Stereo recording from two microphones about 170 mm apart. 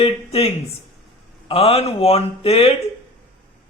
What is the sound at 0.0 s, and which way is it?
Speech, 35° left (ahead or behind).